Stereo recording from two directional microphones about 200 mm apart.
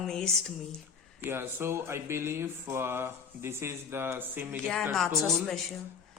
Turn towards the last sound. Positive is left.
turn(degrees=0)  # may be behind; listen again after turning